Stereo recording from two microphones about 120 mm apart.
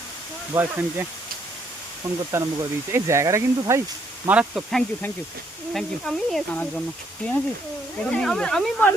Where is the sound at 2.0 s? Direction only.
30° right (ahead or behind).